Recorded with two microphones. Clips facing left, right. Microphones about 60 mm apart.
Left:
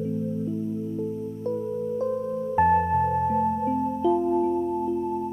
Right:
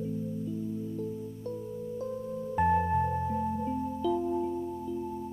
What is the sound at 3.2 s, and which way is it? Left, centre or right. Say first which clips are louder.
Music: left 8 dB; left.